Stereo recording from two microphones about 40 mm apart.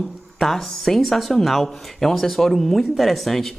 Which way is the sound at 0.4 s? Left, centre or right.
Centre.